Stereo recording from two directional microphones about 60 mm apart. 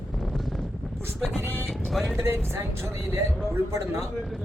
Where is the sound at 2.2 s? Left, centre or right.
Right.